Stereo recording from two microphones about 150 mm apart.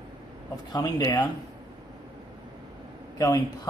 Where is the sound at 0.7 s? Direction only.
25° left (ahead or behind).